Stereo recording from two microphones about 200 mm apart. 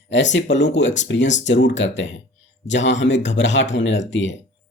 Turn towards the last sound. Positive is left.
turn(degrees=65)  # may be behind; listen again after turning